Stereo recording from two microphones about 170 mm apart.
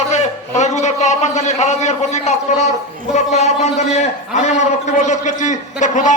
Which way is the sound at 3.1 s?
40° left (ahead or behind).